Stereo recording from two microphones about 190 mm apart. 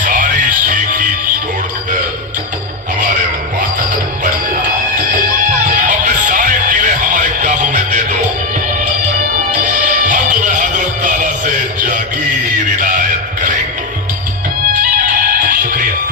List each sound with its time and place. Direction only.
0.0 s music: 45° right (ahead or behind)
3.8 s music: 45° right (ahead or behind)
9.5 s music: 40° right (ahead or behind)
14.7 s music: 45° right (ahead or behind)